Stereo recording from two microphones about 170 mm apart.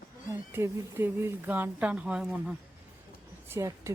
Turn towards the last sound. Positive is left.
turn(degrees=-15)  # may be behind; listen again after turning